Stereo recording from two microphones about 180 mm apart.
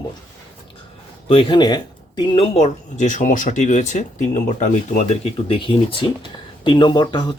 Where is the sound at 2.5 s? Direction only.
40° left (ahead or behind); by 7.3 s 25° left (ahead or behind).